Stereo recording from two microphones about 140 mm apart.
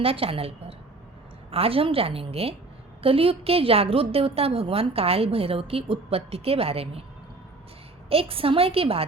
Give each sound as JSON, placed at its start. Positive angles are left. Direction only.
{"t": 0.0, "sound": "a woman's voice", "side_deg": -45}
{"t": 8.1, "sound": "a woman's voice", "side_deg": -40}